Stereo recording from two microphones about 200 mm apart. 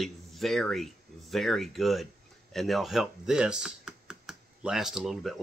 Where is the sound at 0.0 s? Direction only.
Centre (ahead or behind).